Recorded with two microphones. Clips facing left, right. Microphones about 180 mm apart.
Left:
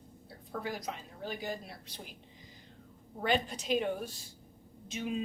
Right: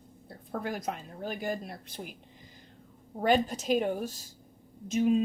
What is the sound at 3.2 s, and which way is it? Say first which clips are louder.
Speech: right 6 dB; 45° right (ahead or behind).